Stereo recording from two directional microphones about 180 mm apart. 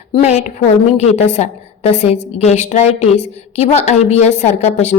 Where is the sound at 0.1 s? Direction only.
40° left (ahead or behind).